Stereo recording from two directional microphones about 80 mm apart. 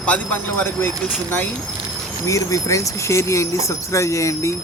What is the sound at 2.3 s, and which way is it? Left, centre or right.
Speech, left.